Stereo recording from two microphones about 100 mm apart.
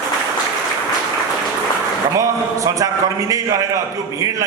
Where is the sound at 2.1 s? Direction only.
30° right (ahead or behind).